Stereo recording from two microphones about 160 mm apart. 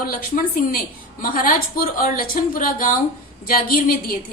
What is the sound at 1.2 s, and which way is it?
A woman's voice, 60° left (ahead or behind).